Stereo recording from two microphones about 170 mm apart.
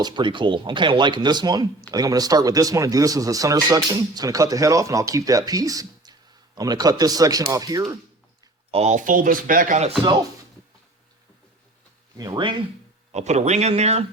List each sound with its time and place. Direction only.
0.0 s speech: 30° right (ahead or behind)
8.7 s speech: 40° right (ahead or behind)
12.1 s speech: 25° right (ahead or behind)
13.1 s speech: 40° right (ahead or behind)